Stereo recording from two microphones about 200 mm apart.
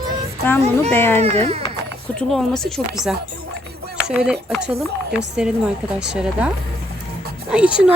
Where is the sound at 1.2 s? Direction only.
30° right (ahead or behind).